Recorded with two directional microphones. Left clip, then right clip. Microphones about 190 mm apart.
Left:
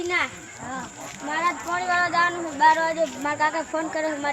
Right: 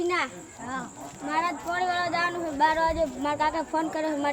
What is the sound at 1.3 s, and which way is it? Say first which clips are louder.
Speech: left 3 dB; 30° right (ahead or behind).